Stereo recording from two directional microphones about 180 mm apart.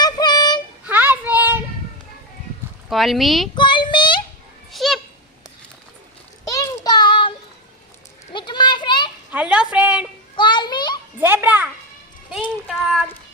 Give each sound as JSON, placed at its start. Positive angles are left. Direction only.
{"t": 0.0, "sound": "child singing", "side_deg": 20}
{"t": 0.9, "sound": "child singing", "side_deg": -10}
{"t": 2.9, "sound": "speech", "side_deg": 0}
{"t": 3.5, "sound": "child singing", "side_deg": 25}
{"t": 4.7, "sound": "a sound", "side_deg": 0}
{"t": 6.4, "sound": "child singing", "side_deg": 20}
{"t": 8.3, "sound": "children playing", "side_deg": 25}
{"t": 9.3, "sound": "a sound", "side_deg": -5}
{"t": 10.3, "sound": "children playing", "side_deg": 25}
{"t": 11.2, "sound": "children playing", "side_deg": -10}
{"t": 12.6, "sound": "a sound", "side_deg": 0}